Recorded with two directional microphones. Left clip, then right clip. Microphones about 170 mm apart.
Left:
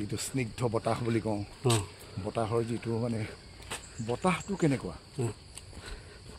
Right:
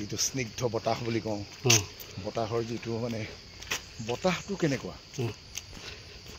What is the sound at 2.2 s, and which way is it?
Speech, 75° left (ahead or behind).